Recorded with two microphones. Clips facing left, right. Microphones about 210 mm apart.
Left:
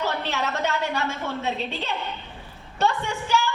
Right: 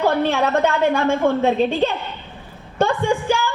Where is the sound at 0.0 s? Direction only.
55° right (ahead or behind).